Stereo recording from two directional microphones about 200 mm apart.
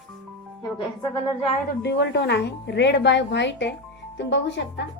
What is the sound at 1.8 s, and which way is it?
A woman's voice, 60° left (ahead or behind).